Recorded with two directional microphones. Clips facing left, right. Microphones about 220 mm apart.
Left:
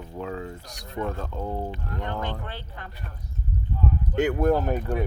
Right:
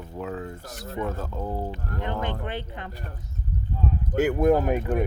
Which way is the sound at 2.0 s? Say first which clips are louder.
Right 3 dB; 20° right (ahead or behind).